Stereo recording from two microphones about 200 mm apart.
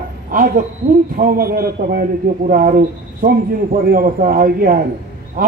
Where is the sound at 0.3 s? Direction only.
45° right (ahead or behind).